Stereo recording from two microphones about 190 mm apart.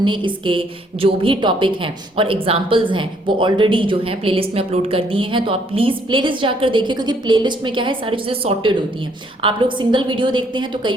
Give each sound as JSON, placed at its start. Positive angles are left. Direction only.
{"t": 0.0, "sound": "speech", "side_deg": -25}